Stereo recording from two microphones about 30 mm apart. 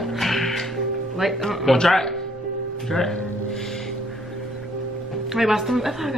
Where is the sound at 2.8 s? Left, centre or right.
Centre.